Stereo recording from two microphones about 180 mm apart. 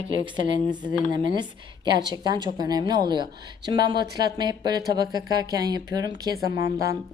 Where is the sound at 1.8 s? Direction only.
25° right (ahead or behind).